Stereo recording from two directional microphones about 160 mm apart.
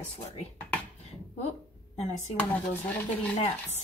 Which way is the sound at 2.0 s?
45° left (ahead or behind).